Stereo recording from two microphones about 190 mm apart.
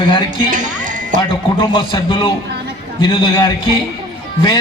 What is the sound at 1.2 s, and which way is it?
A man's voice, 25° left (ahead or behind).